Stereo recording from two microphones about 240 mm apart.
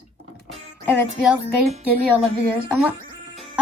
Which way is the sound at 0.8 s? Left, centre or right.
Centre.